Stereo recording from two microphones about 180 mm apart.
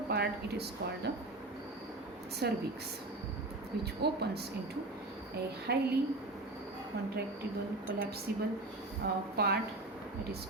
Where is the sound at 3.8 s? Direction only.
65° right (ahead or behind).